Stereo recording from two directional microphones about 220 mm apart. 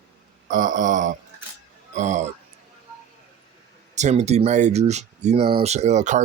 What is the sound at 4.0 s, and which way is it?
Speech, 30° right (ahead or behind).